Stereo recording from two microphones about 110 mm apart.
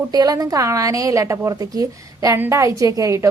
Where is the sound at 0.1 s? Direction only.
35° right (ahead or behind).